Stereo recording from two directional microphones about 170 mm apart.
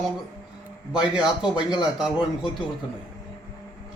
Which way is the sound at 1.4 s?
5° right (ahead or behind).